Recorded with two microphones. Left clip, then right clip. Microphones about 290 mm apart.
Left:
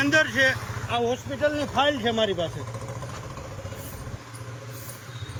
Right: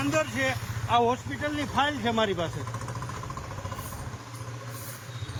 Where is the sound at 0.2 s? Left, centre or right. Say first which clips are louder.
Left 6 dB; centre.